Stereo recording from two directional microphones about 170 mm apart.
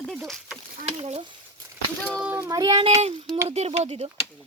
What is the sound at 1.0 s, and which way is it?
Speech, 35° right (ahead or behind).